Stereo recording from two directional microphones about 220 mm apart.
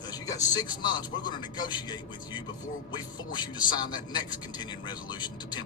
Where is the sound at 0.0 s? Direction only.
15° left (ahead or behind).